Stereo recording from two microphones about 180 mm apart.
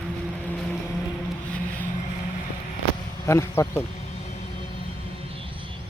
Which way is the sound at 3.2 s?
15° left (ahead or behind).